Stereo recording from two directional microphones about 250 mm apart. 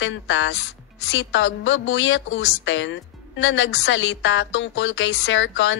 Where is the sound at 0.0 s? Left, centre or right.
Left.